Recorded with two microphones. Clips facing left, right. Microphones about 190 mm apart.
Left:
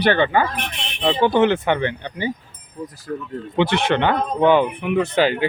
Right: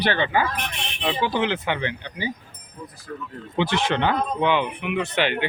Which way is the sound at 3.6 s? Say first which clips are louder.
Left 4 dB; 60° left (ahead or behind).